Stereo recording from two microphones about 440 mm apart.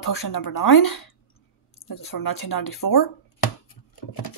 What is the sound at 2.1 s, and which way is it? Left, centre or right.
Speech, left.